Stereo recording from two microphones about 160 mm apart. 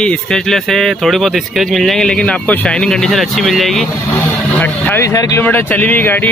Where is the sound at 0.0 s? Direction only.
5° left (ahead or behind).